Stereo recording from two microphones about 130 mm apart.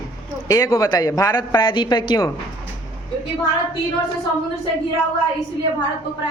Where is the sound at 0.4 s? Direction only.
25° left (ahead or behind).